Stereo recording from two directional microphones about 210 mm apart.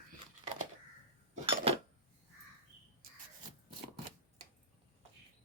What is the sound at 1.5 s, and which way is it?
Cutlery, 25° right (ahead or behind).